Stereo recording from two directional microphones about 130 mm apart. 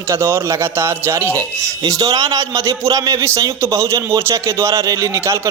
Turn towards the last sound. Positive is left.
turn(degrees=-20)  # may be behind; listen again after turning